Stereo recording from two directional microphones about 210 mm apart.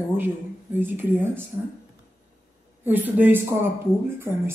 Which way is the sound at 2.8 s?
10° right (ahead or behind).